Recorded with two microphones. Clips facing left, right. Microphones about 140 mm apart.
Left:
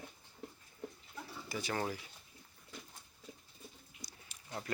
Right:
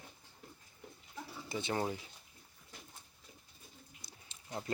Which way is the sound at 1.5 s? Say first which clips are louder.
Right 2 dB; 25° right (ahead or behind).